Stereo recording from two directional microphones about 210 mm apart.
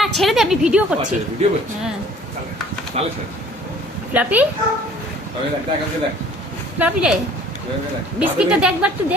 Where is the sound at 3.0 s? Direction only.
30° right (ahead or behind).